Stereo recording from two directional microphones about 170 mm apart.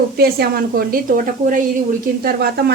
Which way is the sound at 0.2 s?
60° right (ahead or behind).